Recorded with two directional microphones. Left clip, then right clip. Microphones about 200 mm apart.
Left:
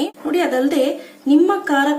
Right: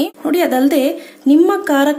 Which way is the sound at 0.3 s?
45° right (ahead or behind).